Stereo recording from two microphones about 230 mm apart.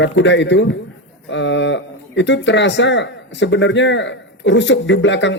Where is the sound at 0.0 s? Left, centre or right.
Left.